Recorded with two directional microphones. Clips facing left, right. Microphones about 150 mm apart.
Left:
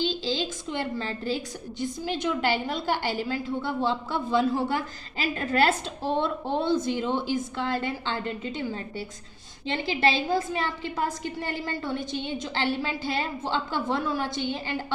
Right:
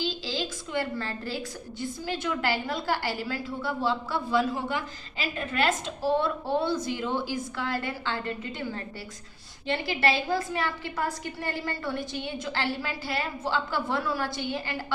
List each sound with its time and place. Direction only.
0.0 s a woman's voice: 25° left (ahead or behind)
4.7 s a woman's voice: 40° left (ahead or behind)
6.0 s a woman's voice: 25° left (ahead or behind)